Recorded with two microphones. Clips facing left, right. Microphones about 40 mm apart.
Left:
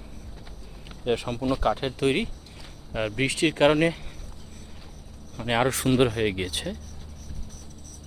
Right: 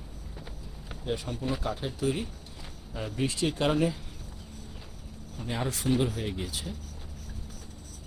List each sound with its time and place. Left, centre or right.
1.0 s speech: left
5.4 s speech: left